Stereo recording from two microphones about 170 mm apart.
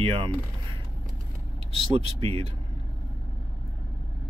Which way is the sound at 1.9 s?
30° right (ahead or behind).